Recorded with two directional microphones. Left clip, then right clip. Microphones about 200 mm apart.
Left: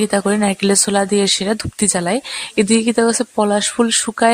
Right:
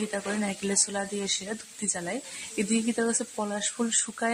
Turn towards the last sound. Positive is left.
turn(degrees=45)  # may be behind; listen again after turning